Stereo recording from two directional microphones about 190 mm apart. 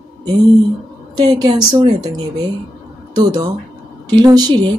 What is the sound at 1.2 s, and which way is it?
Speech, 20° right (ahead or behind).